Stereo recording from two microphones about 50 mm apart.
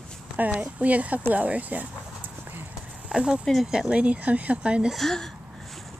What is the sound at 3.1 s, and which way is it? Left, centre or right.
Speech, centre.